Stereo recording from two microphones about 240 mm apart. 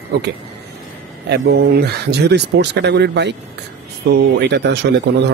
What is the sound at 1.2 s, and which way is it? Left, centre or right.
Speech, right.